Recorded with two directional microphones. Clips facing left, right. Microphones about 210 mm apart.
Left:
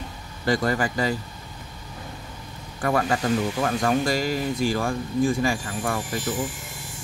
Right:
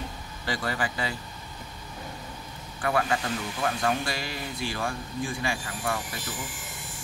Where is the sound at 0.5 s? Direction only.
45° left (ahead or behind).